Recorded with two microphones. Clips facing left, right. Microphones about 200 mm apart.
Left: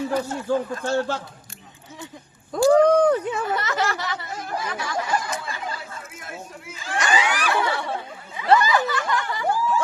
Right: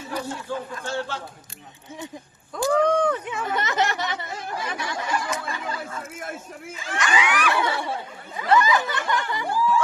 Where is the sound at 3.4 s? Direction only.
20° right (ahead or behind).